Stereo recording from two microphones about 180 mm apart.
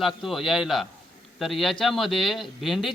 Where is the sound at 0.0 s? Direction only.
Centre (ahead or behind).